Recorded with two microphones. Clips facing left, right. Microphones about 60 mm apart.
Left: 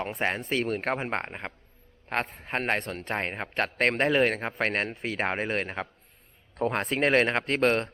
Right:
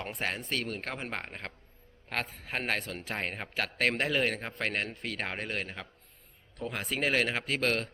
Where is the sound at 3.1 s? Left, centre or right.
Centre.